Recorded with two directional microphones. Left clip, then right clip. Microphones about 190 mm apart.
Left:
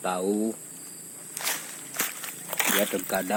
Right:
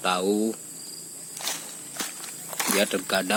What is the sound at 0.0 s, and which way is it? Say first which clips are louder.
Speech: right 3 dB; 10° right (ahead or behind).